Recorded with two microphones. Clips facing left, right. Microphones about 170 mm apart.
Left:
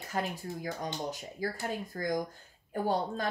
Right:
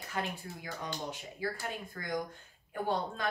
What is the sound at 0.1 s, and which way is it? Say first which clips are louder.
Speech: left 3 dB; 40° left (ahead or behind).